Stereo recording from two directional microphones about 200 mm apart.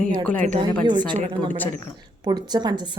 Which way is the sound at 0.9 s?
20° right (ahead or behind).